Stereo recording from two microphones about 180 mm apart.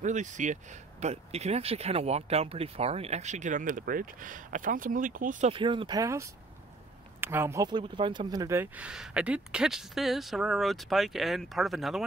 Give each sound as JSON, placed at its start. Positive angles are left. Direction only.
{"t": 0.0, "sound": "speech", "side_deg": -45}
{"t": 5.5, "sound": "speech", "side_deg": -30}